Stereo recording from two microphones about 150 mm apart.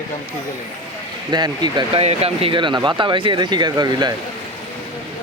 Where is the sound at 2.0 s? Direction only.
40° right (ahead or behind).